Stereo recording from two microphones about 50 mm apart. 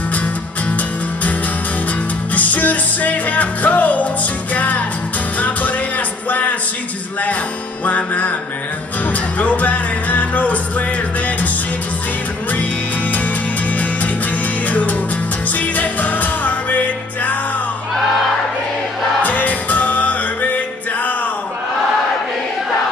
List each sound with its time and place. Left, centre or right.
0.7 s music: left
2.3 s music: left
7.8 s music: left
9.4 s music: left
14.7 s music: left
19.2 s music: left